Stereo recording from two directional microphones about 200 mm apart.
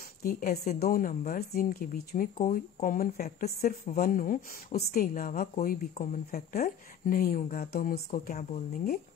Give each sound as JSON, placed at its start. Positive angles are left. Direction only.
{"t": 0.2, "sound": "a woman's voice", "side_deg": 45}